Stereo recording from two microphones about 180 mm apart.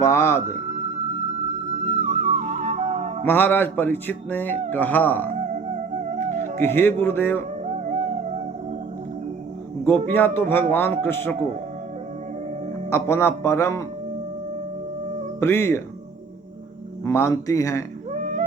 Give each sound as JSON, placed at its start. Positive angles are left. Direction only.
{"t": 0.0, "sound": "speech", "side_deg": 15}
{"t": 1.7, "sound": "music", "side_deg": -40}
{"t": 3.2, "sound": "speech", "side_deg": 10}
{"t": 5.9, "sound": "music", "side_deg": -40}
{"t": 6.6, "sound": "speech", "side_deg": 10}
{"t": 7.6, "sound": "music", "side_deg": -40}
{"t": 9.8, "sound": "speech", "side_deg": 10}
{"t": 12.9, "sound": "speech", "side_deg": 15}
{"t": 15.4, "sound": "speech", "side_deg": 15}
{"t": 17.0, "sound": "speech", "side_deg": 15}
{"t": 18.1, "sound": "music", "side_deg": -45}